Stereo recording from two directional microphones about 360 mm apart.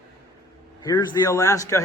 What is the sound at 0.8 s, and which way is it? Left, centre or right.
Speech, centre.